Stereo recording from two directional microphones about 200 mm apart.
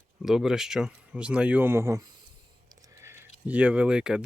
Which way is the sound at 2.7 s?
15° right (ahead or behind).